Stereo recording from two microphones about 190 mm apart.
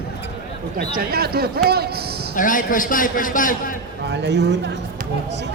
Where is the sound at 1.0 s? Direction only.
55° right (ahead or behind).